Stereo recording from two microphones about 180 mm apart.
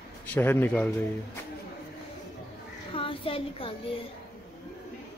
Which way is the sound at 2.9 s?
30° left (ahead or behind).